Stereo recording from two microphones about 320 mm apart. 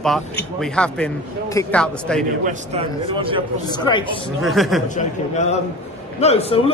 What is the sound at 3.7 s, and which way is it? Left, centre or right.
Speech, centre.